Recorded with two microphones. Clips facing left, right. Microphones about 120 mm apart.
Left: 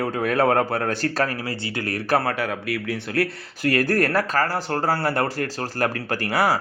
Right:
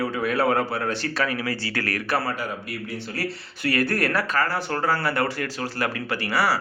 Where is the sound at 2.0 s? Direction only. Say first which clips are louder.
Left 7 dB; 50° left (ahead or behind).